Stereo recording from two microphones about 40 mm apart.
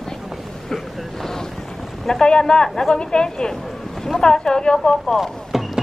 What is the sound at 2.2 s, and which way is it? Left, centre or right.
Speech, left.